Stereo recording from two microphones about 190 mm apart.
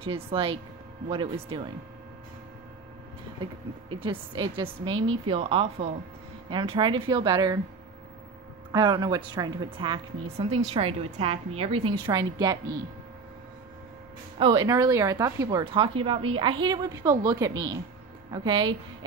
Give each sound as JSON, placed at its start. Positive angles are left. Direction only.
{"t": 0.0, "sound": "a woman's voice", "side_deg": -25}
{"t": 3.9, "sound": "a woman's voice", "side_deg": -25}
{"t": 8.7, "sound": "a woman's voice", "side_deg": -20}
{"t": 14.4, "sound": "a woman's voice", "side_deg": -20}